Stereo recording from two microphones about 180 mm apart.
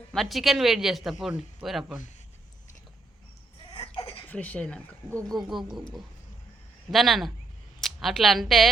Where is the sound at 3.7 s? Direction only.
30° left (ahead or behind).